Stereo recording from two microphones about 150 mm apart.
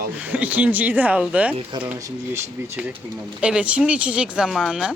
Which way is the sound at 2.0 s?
20° right (ahead or behind).